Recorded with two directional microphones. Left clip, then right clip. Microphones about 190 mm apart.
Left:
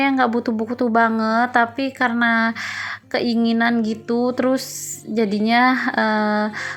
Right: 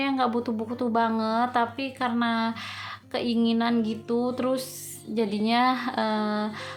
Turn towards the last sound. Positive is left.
turn(degrees=25)  # may be behind; listen again after turning